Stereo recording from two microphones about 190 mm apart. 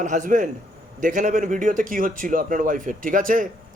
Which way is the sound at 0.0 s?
40° right (ahead or behind).